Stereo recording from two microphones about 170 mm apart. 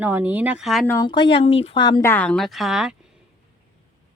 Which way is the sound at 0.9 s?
20° left (ahead or behind).